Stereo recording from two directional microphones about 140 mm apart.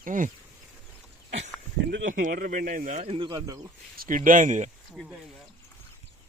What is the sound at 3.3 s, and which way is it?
Speech, 25° right (ahead or behind).